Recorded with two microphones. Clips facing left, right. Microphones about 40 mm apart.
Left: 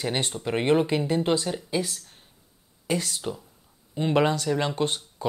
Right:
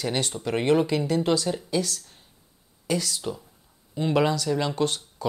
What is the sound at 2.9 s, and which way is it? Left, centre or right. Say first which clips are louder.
Speech: right 1 dB; left.